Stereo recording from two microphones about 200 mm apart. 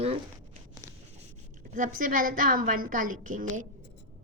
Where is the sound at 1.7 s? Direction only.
40° right (ahead or behind).